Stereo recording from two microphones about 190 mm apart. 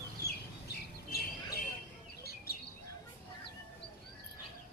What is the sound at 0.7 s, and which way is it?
Squawk, 60° left (ahead or behind).